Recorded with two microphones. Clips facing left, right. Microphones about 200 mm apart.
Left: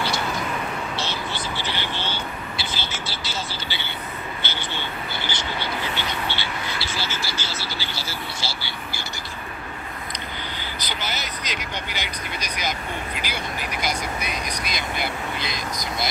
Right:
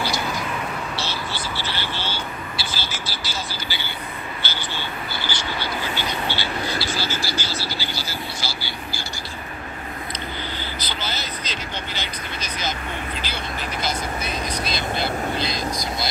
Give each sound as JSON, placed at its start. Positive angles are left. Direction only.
{"t": 0.9, "sound": "vehicle", "side_deg": 20}
{"t": 4.4, "sound": "frog", "side_deg": 20}
{"t": 10.8, "sound": "vehicle", "side_deg": 15}